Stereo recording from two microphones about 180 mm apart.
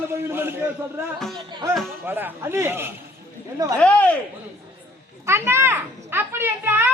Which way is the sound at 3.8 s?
5° left (ahead or behind).